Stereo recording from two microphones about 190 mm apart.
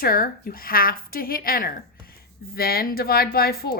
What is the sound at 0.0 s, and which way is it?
Speech, 50° left (ahead or behind).